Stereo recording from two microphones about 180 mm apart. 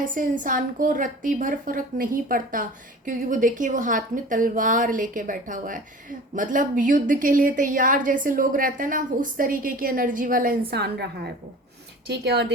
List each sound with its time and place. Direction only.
0.1 s a woman's voice: 45° right (ahead or behind)
10.7 s a woman's voice: 65° right (ahead or behind)